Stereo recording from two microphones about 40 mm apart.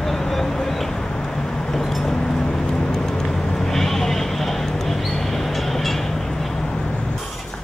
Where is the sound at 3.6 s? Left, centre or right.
Centre.